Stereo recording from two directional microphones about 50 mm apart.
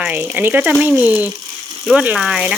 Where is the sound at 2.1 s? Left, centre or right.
Centre.